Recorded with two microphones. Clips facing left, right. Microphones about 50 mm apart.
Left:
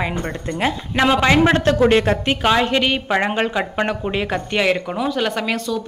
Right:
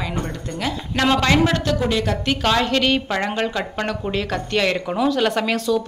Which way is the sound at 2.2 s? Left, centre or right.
Centre.